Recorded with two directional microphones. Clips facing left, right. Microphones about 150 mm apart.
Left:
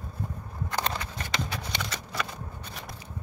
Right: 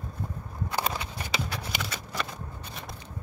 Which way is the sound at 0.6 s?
5° right (ahead or behind).